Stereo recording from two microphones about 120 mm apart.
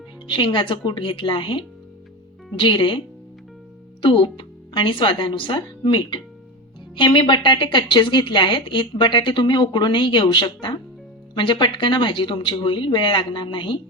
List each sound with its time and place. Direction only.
0.3 s a woman's voice: 45° left (ahead or behind)
4.0 s speech: 45° left (ahead or behind)